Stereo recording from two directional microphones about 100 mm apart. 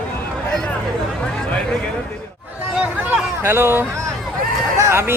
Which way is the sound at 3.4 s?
25° right (ahead or behind).